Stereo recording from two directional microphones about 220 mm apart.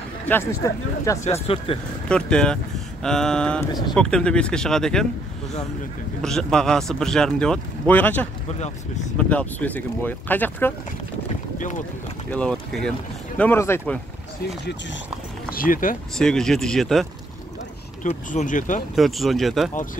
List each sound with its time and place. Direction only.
0.3 s speech: 10° left (ahead or behind)
1.5 s speech: 25° left (ahead or behind)
2.0 s speech: 5° left (ahead or behind)
6.2 s speech: centre (ahead or behind)
9.3 s speech: 5° left (ahead or behind)
12.3 s speech: 5° left (ahead or behind)
15.5 s speech: 40° left (ahead or behind)
16.2 s speech: 5° left (ahead or behind)
18.0 s speech: 35° left (ahead or behind)
18.9 s speech: centre (ahead or behind)